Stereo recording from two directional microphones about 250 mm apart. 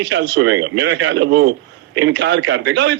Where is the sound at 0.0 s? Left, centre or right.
Right.